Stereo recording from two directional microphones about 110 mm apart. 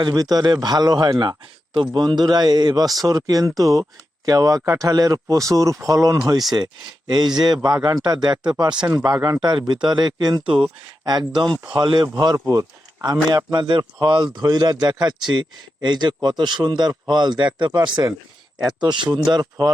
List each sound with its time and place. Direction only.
0.0 s speech: 35° right (ahead or behind)